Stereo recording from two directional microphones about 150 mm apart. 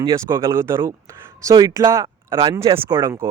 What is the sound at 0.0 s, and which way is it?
Speech, 20° right (ahead or behind).